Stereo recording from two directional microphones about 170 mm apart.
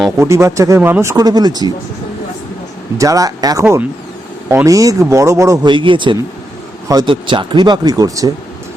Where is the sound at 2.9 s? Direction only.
20° right (ahead or behind).